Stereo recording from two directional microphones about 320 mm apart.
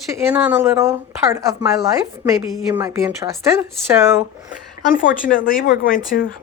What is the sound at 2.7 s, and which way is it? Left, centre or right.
Speech, centre.